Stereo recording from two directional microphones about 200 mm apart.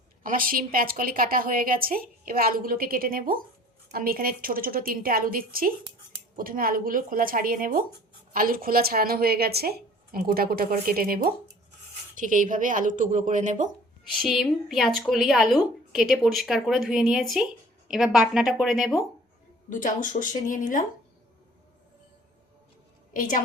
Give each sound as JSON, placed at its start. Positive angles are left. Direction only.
{"t": 0.2, "sound": "a woman's voice", "side_deg": -45}
{"t": 14.2, "sound": "a woman's voice", "side_deg": 0}
{"t": 19.7, "sound": "speech", "side_deg": 40}
{"t": 23.1, "sound": "a woman's voice", "side_deg": 40}